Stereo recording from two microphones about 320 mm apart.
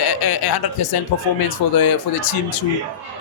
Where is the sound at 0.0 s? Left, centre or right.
Left.